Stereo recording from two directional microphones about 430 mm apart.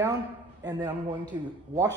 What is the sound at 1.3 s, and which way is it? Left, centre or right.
Speech, centre.